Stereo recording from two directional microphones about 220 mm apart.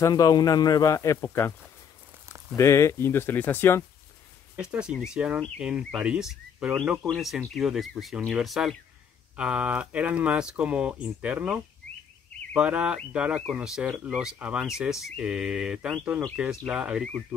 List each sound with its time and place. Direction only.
0.0 s speech: 15° left (ahead or behind)
2.5 s speech: 15° left (ahead or behind)
4.6 s speech: 5° right (ahead or behind)